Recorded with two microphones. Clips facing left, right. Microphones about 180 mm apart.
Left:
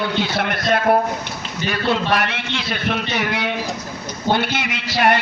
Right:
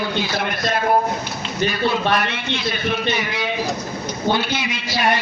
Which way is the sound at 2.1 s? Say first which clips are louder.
Even; 75° left (ahead or behind).